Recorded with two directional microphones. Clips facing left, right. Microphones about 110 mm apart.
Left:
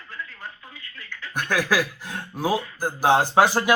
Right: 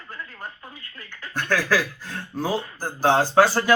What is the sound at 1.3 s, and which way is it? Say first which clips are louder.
Speech: right 1 dB; 15° left (ahead or behind).